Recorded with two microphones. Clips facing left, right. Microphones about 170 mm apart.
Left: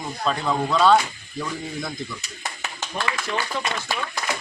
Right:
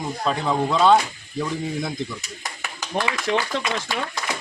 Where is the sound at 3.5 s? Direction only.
90° right.